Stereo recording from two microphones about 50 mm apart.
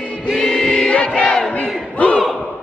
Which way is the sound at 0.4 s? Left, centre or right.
Centre.